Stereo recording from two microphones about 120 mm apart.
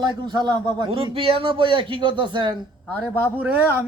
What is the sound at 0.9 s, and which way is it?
Speech, 50° right (ahead or behind).